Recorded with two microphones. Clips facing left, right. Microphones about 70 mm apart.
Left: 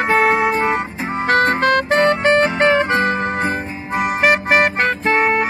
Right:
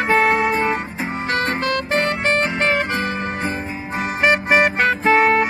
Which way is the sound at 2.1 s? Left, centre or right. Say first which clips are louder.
Left 5 dB; left.